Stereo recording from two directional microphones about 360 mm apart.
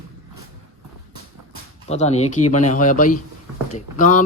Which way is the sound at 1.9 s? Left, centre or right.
Centre.